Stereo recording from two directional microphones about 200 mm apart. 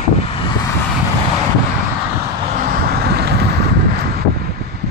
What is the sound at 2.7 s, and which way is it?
Vehicle, 50° right (ahead or behind).